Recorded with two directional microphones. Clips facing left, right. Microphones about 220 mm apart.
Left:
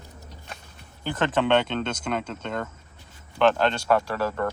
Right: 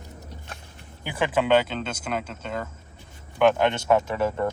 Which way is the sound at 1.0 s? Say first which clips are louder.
Left 1 dB; 10° right (ahead or behind).